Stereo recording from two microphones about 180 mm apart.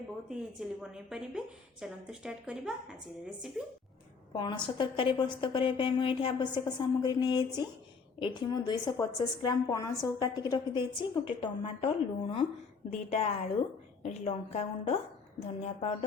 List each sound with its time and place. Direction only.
0.3 s a woman's voice: 5° right (ahead or behind)
4.3 s a woman's voice: 25° left (ahead or behind)